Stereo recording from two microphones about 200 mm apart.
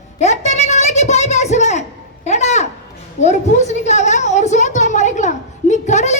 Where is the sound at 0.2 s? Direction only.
35° left (ahead or behind).